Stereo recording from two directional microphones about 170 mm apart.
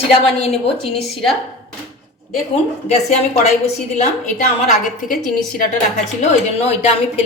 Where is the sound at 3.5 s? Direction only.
40° left (ahead or behind).